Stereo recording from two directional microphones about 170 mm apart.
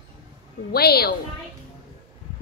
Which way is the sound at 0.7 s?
65° left (ahead or behind).